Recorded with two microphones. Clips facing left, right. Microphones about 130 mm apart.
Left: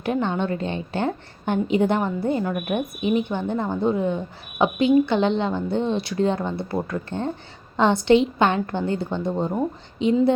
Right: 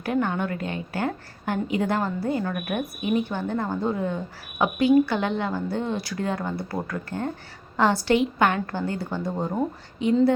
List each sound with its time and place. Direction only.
0.0 s a woman's voice: 20° left (ahead or behind)